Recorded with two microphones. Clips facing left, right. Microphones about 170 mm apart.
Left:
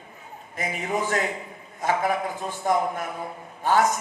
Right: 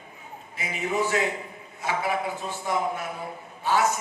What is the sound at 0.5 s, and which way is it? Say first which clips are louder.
Speech: even; 50° left (ahead or behind).